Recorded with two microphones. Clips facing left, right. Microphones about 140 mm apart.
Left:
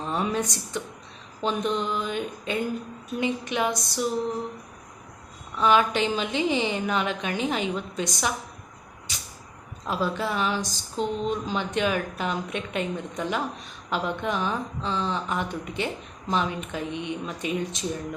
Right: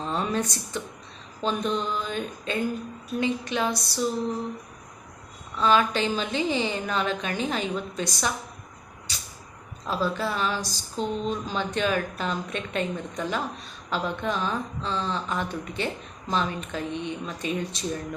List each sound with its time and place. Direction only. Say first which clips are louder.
0.0 s a woman's voice: even; 10° left (ahead or behind)
5.5 s speech: left 1 dB; 15° left (ahead or behind)
9.8 s speech: even; 15° left (ahead or behind)